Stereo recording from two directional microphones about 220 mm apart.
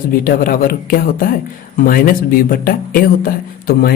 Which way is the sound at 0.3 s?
40° left (ahead or behind).